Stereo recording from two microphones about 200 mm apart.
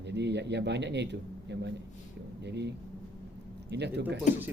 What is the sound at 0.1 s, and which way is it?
A man's voice, 60° right (ahead or behind).